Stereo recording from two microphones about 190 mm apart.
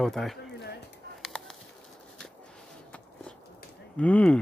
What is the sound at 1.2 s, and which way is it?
Bird, centre (ahead or behind).